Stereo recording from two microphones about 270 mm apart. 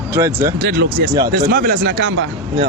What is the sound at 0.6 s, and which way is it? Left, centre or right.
Speech, right.